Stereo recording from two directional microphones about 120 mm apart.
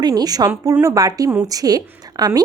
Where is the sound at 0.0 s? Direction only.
35° right (ahead or behind).